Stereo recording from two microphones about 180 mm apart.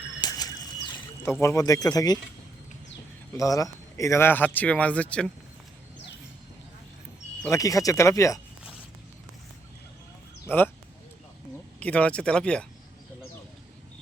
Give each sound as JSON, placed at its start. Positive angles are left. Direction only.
{"t": 0.2, "sound": "a sound", "side_deg": 20}
{"t": 1.2, "sound": "speech", "side_deg": 15}
{"t": 3.3, "sound": "a man's voice", "side_deg": 20}
{"t": 7.5, "sound": "a man's voice", "side_deg": 20}
{"t": 10.4, "sound": "speech", "side_deg": 10}
{"t": 11.8, "sound": "speech", "side_deg": 10}